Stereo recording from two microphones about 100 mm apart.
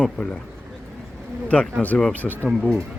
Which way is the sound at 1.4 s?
15° left (ahead or behind).